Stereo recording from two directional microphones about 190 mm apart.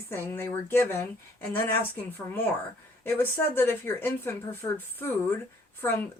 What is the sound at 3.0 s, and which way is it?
Speech, 10° left (ahead or behind).